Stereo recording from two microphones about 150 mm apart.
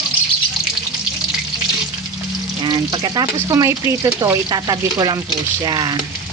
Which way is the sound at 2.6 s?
30° right (ahead or behind).